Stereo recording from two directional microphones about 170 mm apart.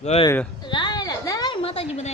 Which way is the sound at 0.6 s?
25° left (ahead or behind).